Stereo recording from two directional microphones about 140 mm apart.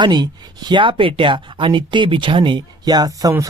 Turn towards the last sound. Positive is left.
turn(degrees=-25)  # may be behind; listen again after turning